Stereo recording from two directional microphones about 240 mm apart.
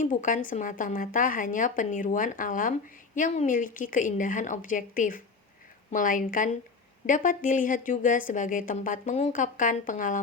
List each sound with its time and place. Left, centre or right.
0.0 s speech: left